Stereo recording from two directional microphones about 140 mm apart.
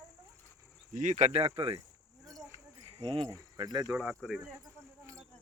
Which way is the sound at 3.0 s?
40° right (ahead or behind).